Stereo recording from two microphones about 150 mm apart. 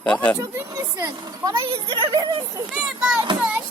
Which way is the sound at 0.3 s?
20° right (ahead or behind).